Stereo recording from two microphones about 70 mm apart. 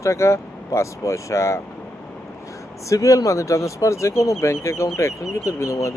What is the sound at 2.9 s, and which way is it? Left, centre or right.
Speech, left.